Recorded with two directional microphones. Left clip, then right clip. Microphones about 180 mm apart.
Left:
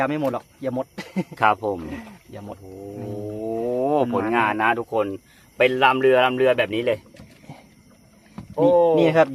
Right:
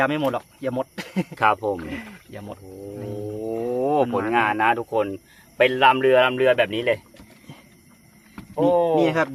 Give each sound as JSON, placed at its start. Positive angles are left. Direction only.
{"t": 0.0, "sound": "speech", "side_deg": 5}
{"t": 1.4, "sound": "speech", "side_deg": 10}
{"t": 1.8, "sound": "speech", "side_deg": -10}
{"t": 3.0, "sound": "speech", "side_deg": 10}
{"t": 8.7, "sound": "speech", "side_deg": 0}
{"t": 9.0, "sound": "speech", "side_deg": 40}